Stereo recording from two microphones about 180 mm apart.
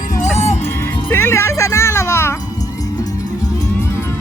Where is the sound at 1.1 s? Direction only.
15° left (ahead or behind).